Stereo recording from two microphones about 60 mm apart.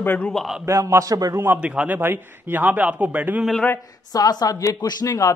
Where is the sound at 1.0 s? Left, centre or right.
Right.